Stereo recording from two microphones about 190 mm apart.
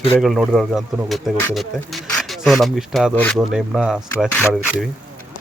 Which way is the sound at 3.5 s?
Centre (ahead or behind).